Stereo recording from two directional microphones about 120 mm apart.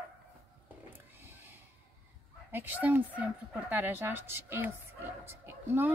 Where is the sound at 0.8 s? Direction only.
15° right (ahead or behind).